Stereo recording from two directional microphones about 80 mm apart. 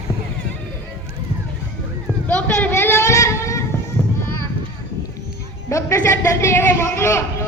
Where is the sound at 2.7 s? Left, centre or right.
Left.